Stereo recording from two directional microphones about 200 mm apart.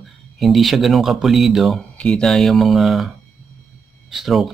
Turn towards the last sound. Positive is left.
turn(degrees=0)  # may be behind; listen again after turning